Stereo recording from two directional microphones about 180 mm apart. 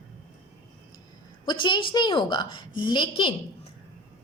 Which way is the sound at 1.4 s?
25° left (ahead or behind).